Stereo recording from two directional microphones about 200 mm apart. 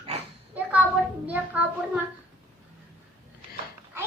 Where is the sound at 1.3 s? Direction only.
5° right (ahead or behind).